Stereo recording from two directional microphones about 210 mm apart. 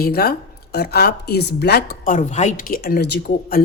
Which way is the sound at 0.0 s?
45° left (ahead or behind).